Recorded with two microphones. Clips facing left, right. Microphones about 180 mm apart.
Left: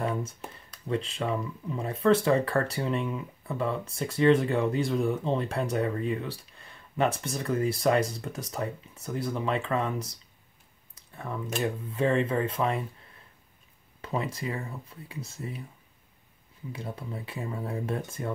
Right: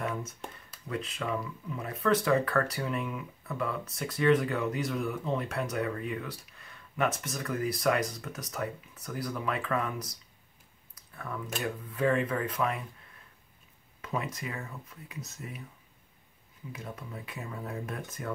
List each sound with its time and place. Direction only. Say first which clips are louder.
0.0 s a sound: left 4 dB; 30° left (ahead or behind)
0.8 s speech: left 5 dB; 30° left (ahead or behind)
11.1 s speech: left 5 dB; 25° left (ahead or behind)
14.0 s speech: left 4 dB; 30° left (ahead or behind)
16.7 s speech: left 4 dB; 30° left (ahead or behind)